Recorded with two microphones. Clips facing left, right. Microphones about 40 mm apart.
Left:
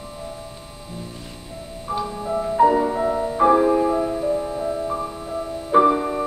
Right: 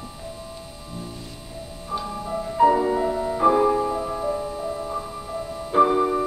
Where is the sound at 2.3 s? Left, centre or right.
Left.